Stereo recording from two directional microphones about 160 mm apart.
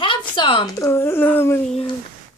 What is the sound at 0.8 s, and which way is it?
Speech, 15° left (ahead or behind).